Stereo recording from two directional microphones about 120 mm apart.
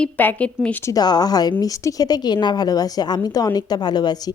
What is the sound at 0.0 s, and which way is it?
Speech, 10° left (ahead or behind).